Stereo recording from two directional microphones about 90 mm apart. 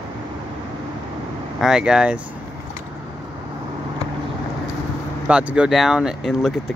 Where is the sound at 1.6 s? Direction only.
5° right (ahead or behind).